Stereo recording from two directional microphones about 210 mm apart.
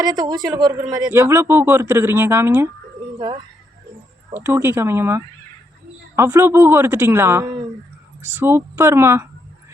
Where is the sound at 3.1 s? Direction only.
20° right (ahead or behind).